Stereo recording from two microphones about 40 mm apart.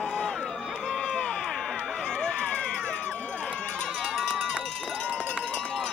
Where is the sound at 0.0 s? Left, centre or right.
Left.